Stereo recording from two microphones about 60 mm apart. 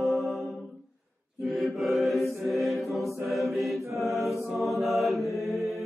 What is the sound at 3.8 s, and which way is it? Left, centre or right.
Mantra, right.